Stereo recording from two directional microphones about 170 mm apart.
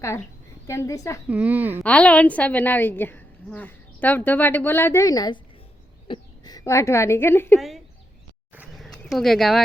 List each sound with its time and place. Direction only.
0.7 s a woman's voice: 15° left (ahead or behind)
1.3 s speech: 10° right (ahead or behind)
1.8 s a woman's voice: 10° left (ahead or behind)
8.8 s bird: centre (ahead or behind)